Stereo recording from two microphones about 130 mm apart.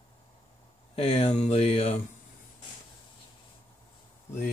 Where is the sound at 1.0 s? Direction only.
55° left (ahead or behind).